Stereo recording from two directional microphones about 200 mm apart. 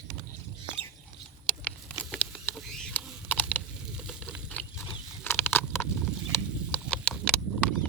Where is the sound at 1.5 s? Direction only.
5° left (ahead or behind).